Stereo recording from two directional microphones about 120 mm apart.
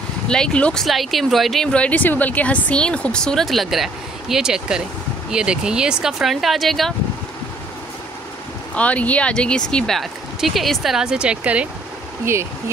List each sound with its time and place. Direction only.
0.3 s speech: 5° left (ahead or behind)
8.7 s speech: 10° left (ahead or behind); by 11.7 s 10° right (ahead or behind)
12.3 s speech: 20° right (ahead or behind)